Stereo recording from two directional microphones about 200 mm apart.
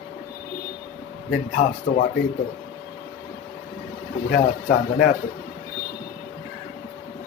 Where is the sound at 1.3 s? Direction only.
50° left (ahead or behind).